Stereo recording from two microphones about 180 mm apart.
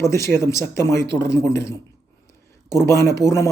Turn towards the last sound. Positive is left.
turn(degrees=15)  # may be behind; listen again after turning